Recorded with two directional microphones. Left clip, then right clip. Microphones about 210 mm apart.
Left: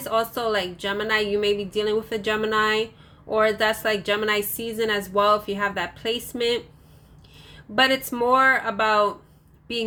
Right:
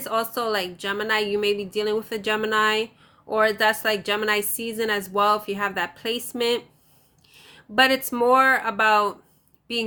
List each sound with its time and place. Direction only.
0.0 s a woman's voice: 15° right (ahead or behind)